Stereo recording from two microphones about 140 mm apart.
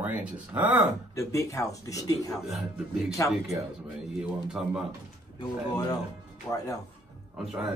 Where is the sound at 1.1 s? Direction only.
20° left (ahead or behind).